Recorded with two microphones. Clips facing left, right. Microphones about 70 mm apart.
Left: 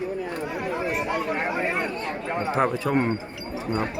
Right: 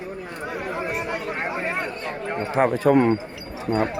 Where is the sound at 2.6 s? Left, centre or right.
Right.